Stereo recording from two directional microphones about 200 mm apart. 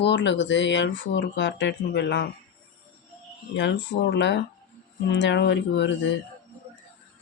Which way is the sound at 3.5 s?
60° left (ahead or behind).